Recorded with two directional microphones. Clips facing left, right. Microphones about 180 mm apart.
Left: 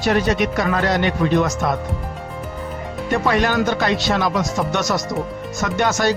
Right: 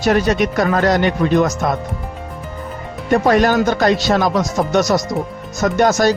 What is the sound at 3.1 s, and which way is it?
Speech, 40° right (ahead or behind).